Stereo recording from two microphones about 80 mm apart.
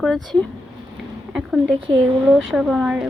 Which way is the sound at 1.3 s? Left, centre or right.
Centre.